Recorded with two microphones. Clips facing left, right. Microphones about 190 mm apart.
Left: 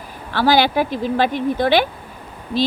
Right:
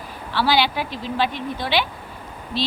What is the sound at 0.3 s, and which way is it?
Speech, 45° left (ahead or behind).